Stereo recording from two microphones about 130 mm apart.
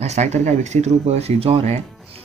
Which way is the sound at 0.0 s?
60° right (ahead or behind).